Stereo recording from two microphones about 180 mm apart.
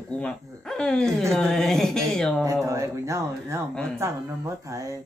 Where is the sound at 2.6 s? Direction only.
15° right (ahead or behind).